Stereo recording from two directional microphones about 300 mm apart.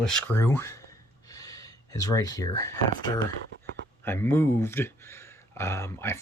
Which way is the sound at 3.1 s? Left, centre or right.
Centre.